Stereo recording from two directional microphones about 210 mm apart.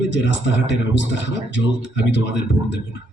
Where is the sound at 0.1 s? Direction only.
60° left (ahead or behind).